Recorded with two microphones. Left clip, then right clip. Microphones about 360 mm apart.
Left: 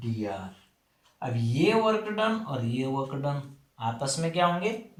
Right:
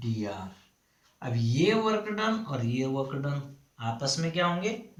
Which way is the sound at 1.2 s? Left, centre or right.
Centre.